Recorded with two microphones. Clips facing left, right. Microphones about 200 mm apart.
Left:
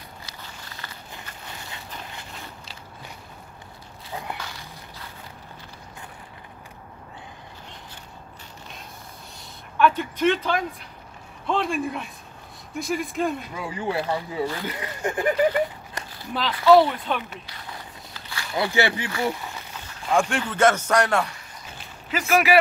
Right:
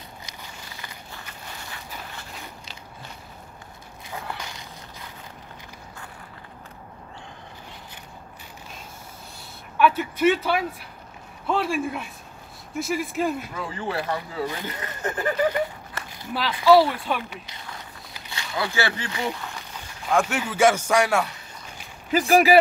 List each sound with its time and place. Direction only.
0.3 s walk: 15° right (ahead or behind)
4.4 s a sound: 15° right (ahead or behind)
9.8 s a man's voice: 5° right (ahead or behind)
13.6 s speech: 10° left (ahead or behind)
16.3 s speech: 5° right (ahead or behind)
18.6 s speech: 20° left (ahead or behind)
20.1 s a man's voice: 5° right (ahead or behind)
22.1 s speech: 35° right (ahead or behind)